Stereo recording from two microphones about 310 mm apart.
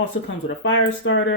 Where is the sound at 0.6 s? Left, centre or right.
Left.